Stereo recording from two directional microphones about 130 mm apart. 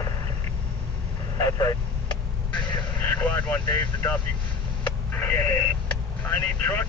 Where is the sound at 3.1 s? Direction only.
10° left (ahead or behind).